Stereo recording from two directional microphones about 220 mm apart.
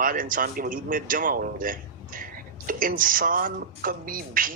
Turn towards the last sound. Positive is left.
turn(degrees=-40)  # may be behind; listen again after turning